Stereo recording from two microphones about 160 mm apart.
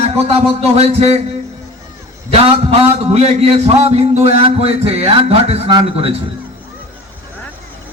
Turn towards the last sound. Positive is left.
turn(degrees=-40)  # may be behind; listen again after turning